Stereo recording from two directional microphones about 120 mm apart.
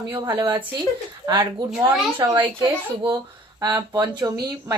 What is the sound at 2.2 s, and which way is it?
Speech, 40° right (ahead or behind).